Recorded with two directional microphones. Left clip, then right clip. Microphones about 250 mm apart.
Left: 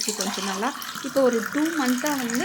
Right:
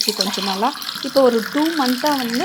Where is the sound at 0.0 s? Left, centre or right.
Centre.